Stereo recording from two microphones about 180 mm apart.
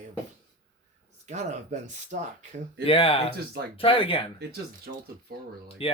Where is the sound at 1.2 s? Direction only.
40° right (ahead or behind).